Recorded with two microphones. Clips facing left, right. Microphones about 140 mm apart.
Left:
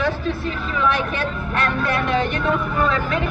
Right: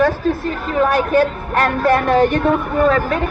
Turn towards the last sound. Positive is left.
turn(degrees=-45)  # may be behind; listen again after turning